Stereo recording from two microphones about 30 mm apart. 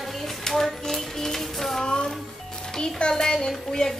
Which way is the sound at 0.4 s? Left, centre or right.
Centre.